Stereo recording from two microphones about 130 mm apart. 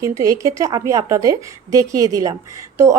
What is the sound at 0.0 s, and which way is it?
A woman's voice, 25° right (ahead or behind).